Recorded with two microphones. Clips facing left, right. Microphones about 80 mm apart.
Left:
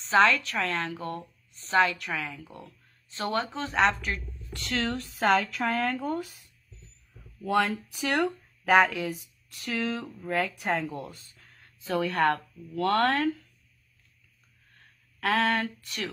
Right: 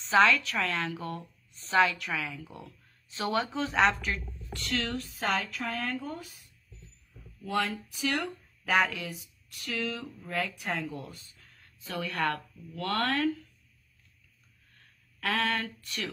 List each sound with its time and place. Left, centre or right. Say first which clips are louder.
0.0 s a woman's voice: left 1 dB; centre
4.6 s speech: left 3 dB; left
5.2 s speech: left 8 dB; left
5.7 s speech: left 8 dB; left
7.4 s speech: left 5 dB; left
11.9 s speech: left 6 dB; left
15.1 s a sound: left 4 dB; left